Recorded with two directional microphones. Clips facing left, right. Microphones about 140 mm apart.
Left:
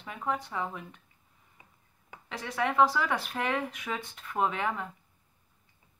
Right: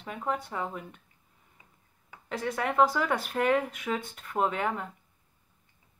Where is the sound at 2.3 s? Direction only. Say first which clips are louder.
Right 1 dB; 50° right (ahead or behind).